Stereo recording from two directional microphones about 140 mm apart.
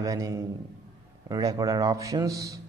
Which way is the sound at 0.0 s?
25° right (ahead or behind).